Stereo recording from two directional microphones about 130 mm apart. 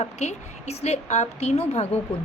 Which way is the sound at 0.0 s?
60° left (ahead or behind).